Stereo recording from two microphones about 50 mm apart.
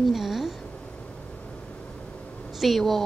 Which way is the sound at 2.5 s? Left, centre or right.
Centre.